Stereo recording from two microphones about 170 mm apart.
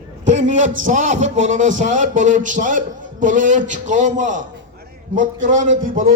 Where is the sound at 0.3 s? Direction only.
45° right (ahead or behind).